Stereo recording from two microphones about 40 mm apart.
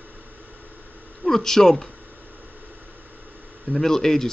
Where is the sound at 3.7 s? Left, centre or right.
Centre.